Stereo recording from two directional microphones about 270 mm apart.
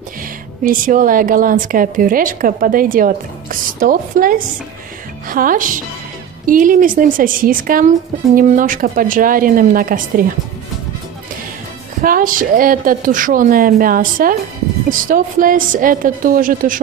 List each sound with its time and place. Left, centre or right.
0.7 s a woman's voice: right
12.0 s a woman's voice: right